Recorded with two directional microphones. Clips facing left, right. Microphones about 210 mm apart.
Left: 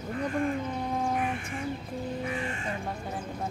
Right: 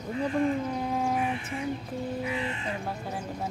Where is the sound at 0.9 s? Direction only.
Centre (ahead or behind).